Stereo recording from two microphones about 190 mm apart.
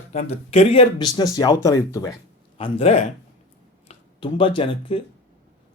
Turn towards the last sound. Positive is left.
turn(degrees=30)  # may be behind; listen again after turning